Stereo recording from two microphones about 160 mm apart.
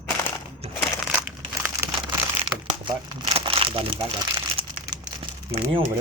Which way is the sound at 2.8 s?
30° right (ahead or behind).